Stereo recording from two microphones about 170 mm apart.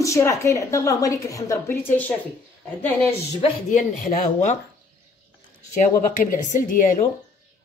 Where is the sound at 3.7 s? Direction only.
50° left (ahead or behind).